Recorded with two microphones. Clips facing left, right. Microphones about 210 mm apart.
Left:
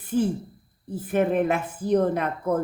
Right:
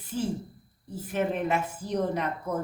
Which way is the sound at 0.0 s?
55° left (ahead or behind).